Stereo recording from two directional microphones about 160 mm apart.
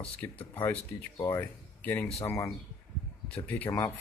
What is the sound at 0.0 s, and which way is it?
Speech, 10° left (ahead or behind).